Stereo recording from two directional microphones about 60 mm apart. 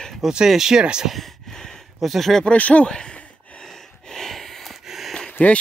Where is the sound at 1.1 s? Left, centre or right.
Centre.